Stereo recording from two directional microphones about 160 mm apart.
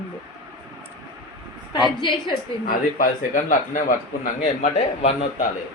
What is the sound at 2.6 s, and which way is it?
Speech, 60° left (ahead or behind).